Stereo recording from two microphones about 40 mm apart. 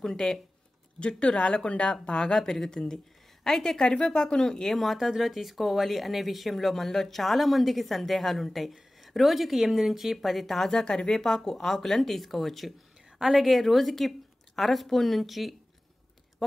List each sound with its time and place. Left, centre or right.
0.0 s speech: centre
0.9 s speech: left
2.3 s speech: centre
3.8 s speech: left
4.7 s speech: centre
10.7 s speech: centre